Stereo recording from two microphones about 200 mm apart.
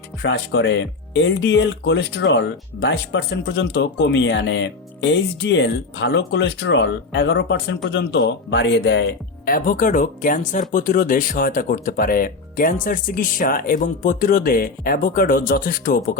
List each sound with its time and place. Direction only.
0.2 s speech: 60° left (ahead or behind)
9.5 s speech: 45° left (ahead or behind)